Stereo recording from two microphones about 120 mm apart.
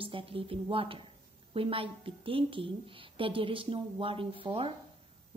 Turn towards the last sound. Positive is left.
turn(degrees=-50)  # may be behind; listen again after turning